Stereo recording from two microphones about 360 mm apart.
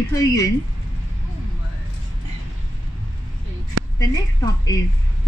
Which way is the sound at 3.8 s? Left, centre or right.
Right.